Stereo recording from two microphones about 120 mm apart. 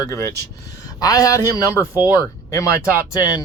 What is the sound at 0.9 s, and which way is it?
Speech, 30° left (ahead or behind).